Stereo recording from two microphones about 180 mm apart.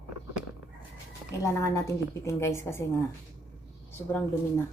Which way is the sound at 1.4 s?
15° left (ahead or behind).